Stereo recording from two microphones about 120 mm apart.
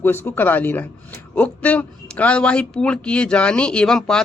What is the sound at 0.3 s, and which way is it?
Speech, 15° left (ahead or behind).